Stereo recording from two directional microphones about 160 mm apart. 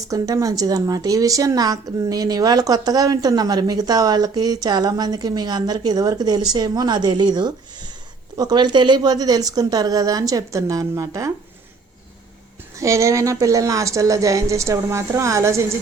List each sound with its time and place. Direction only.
0.1 s a woman's voice: 20° right (ahead or behind)
12.7 s a woman's voice: 20° right (ahead or behind)